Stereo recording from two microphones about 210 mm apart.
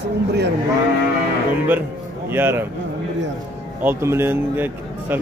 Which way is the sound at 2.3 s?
10° right (ahead or behind).